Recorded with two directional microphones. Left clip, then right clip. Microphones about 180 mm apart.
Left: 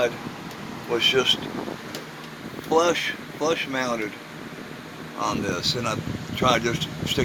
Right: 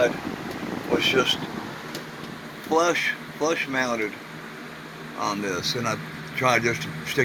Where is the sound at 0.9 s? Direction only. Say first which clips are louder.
Left 1 dB; 10° left (ahead or behind).